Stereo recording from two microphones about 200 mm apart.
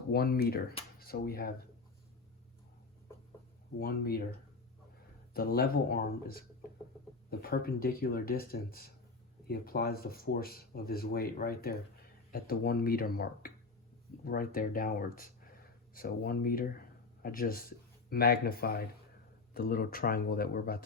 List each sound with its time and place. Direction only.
0.1 s speech: 50° left (ahead or behind)
3.8 s speech: 50° left (ahead or behind)
5.3 s speech: 50° left (ahead or behind)